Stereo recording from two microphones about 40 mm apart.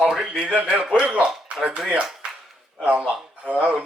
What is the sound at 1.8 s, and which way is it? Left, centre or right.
A man's voice, right.